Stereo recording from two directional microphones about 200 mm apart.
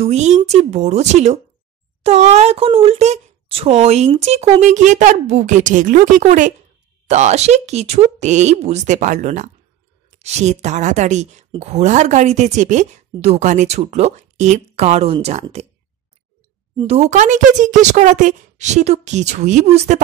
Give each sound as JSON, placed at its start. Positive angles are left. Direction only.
{"t": 0.0, "sound": "speech", "side_deg": -35}
{"t": 16.7, "sound": "speech", "side_deg": -30}